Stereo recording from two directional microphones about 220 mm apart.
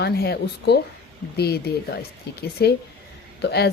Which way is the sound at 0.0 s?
45° left (ahead or behind).